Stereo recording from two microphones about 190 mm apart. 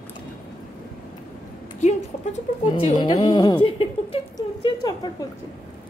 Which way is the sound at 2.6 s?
25° left (ahead or behind).